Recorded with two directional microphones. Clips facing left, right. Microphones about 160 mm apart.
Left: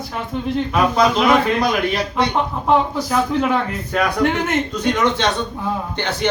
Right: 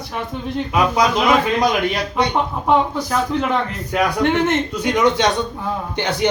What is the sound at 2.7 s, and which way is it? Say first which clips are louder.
Speech: even; 5° left (ahead or behind).